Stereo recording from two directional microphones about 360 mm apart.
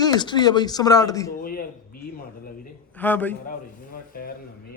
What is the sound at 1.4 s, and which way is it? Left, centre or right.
Speech, left.